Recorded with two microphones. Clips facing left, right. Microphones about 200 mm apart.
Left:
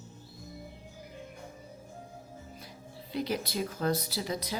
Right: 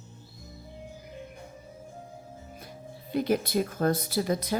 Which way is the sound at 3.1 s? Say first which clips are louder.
Right 7 dB; 50° right (ahead or behind).